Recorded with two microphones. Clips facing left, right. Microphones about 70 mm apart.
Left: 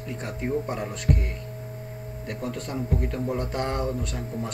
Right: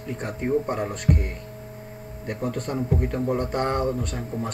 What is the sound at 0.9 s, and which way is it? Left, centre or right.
Speech, right.